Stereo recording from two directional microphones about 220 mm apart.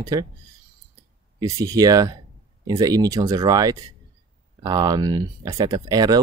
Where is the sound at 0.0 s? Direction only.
15° right (ahead or behind).